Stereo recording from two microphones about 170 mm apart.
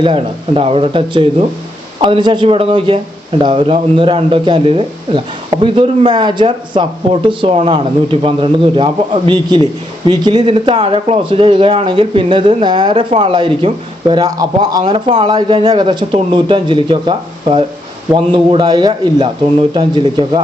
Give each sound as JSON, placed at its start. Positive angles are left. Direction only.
{"t": 0.0, "sound": "speech", "side_deg": -30}